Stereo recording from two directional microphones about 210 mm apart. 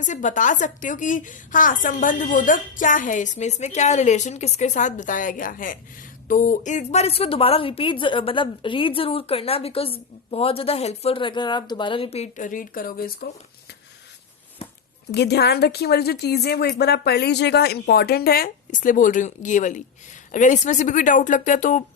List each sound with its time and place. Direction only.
0.0 s a woman's voice: 35° left (ahead or behind)
15.1 s a woman's voice: 50° left (ahead or behind); by 21.8 s 35° left (ahead or behind)